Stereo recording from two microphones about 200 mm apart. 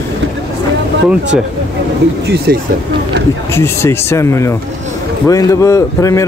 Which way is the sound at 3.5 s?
10° left (ahead or behind).